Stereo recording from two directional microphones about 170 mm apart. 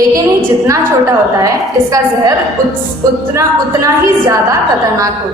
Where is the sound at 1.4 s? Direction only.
20° right (ahead or behind).